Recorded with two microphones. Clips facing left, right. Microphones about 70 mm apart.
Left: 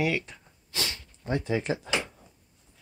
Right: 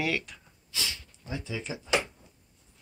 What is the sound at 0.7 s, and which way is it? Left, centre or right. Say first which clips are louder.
Sniff: left 2 dB; left.